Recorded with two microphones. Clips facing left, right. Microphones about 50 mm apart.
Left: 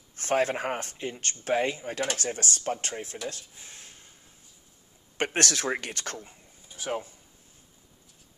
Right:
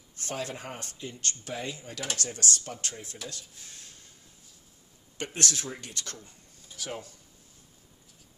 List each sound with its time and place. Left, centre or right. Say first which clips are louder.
0.1 s speech: left 10 dB; left
2.1 s speech: left 1 dB; left
5.1 s speech: left 5 dB; left
5.7 s speech: left 10 dB; left
5.9 s speech: left 5 dB; left
6.2 s a sound: left 2 dB; centre